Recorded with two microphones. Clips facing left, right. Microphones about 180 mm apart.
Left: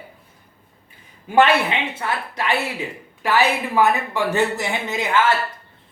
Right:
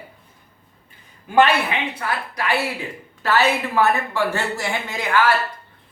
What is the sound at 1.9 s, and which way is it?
Speech, 25° left (ahead or behind).